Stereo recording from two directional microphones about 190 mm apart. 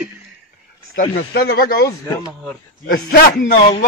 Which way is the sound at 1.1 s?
55° left (ahead or behind).